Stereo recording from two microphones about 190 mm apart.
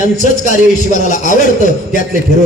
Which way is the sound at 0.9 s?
40° left (ahead or behind).